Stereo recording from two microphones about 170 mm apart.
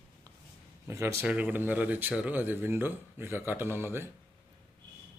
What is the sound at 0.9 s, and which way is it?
Speech, 15° right (ahead or behind).